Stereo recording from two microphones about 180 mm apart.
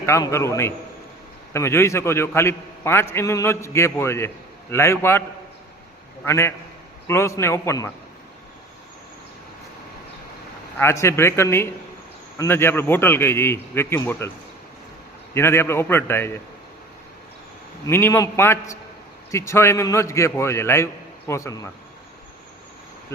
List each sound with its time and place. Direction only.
0.0 s a man's voice: 15° left (ahead or behind)
6.2 s a man's voice: 15° left (ahead or behind)
10.8 s a man's voice: 15° left (ahead or behind)
15.4 s a man's voice: 15° left (ahead or behind)
17.8 s a man's voice: 15° left (ahead or behind)